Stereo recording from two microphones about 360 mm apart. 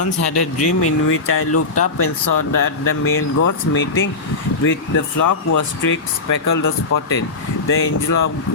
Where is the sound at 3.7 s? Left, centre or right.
Left.